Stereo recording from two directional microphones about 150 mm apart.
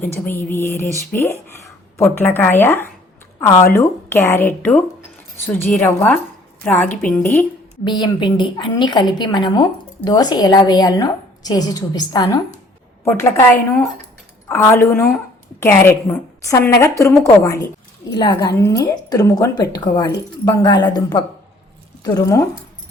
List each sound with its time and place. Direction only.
0.0 s a woman's voice: 15° left (ahead or behind)
7.9 s a woman's voice: 30° left (ahead or behind)
13.1 s a woman's voice: 15° left (ahead or behind)